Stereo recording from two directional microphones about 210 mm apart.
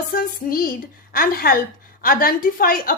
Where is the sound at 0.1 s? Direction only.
45° left (ahead or behind).